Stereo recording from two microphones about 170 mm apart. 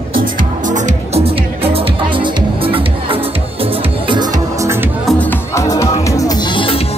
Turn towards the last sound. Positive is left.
turn(degrees=30)  # may be behind; listen again after turning